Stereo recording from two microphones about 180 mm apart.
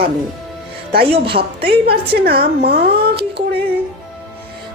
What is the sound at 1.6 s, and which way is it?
A woman's voice, 60° right (ahead or behind).